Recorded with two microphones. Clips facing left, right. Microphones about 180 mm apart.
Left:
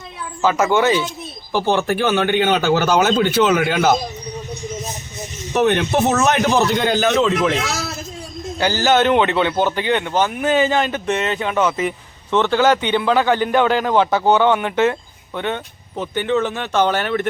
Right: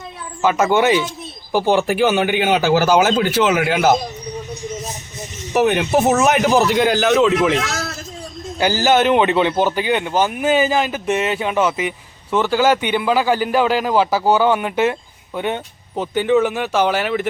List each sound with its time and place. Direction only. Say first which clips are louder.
0.4 s speech: right 1 dB; 20° right (ahead or behind); by 3.9 s 5° right (ahead or behind)
5.5 s speech: right 1 dB; 5° right (ahead or behind)
8.5 s speech: right 1 dB; 15° right (ahead or behind)